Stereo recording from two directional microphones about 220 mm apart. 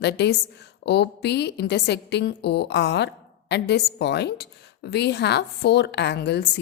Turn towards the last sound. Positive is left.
turn(degrees=50)  # may be behind; listen again after turning